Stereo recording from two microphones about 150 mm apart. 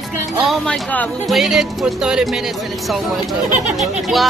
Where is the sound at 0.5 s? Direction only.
10° left (ahead or behind).